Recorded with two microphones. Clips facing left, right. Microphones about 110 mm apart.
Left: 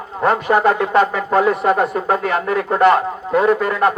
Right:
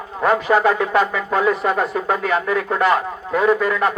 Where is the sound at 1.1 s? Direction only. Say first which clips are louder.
Left 3 dB; 40° left (ahead or behind).